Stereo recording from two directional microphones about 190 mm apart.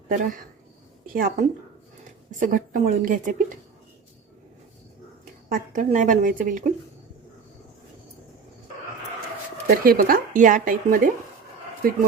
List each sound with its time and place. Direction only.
0.1 s speech: 45° right (ahead or behind)
5.5 s speech: 45° right (ahead or behind)
9.6 s speech: 50° right (ahead or behind)